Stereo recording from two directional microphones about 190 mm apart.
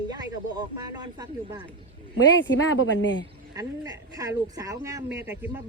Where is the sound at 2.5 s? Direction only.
90° left.